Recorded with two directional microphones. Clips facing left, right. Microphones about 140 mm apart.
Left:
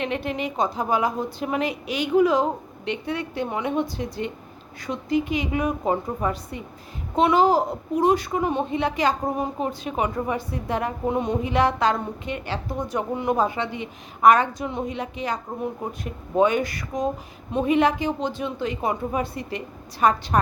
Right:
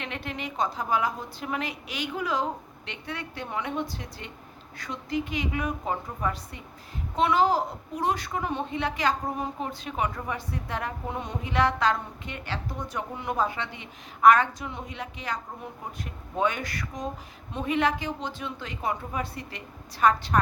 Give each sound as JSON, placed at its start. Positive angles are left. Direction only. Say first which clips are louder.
{"t": 0.0, "sound": "a woman's voice", "louder": "left 8 dB", "side_deg": 15}
{"t": 16.4, "sound": "a woman's voice", "louder": "left 7 dB", "side_deg": 15}